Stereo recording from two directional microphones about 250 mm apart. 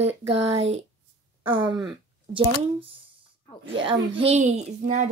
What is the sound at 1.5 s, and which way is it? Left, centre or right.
A woman's voice, centre.